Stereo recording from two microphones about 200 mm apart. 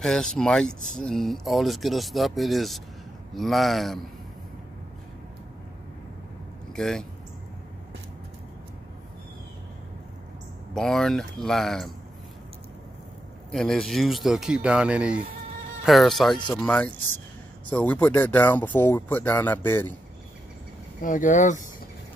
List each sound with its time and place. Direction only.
0.0 s speech: 5° left (ahead or behind)
6.7 s speech: 5° left (ahead or behind)
10.7 s speech: centre (ahead or behind)
13.5 s speech: centre (ahead or behind)
21.0 s speech: 40° left (ahead or behind)